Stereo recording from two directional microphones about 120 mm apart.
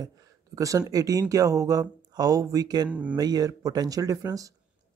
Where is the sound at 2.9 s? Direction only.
10° right (ahead or behind).